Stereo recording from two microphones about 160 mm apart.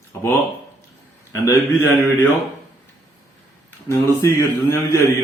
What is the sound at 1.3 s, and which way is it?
Speech, 15° left (ahead or behind).